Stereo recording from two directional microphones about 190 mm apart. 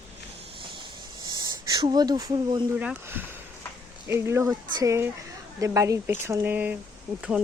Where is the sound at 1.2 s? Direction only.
20° right (ahead or behind).